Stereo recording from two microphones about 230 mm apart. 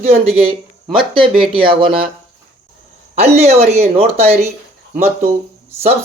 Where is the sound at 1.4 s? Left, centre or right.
Right.